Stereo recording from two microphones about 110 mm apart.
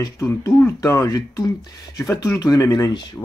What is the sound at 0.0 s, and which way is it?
Speech, 30° left (ahead or behind).